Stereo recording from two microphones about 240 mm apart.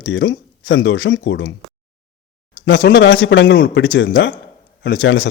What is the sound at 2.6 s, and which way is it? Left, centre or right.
Speech, left.